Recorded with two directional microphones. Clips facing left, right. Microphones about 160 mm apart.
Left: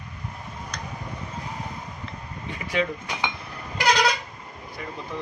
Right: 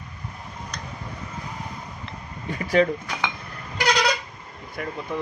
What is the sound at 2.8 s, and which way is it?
Speech, 40° right (ahead or behind).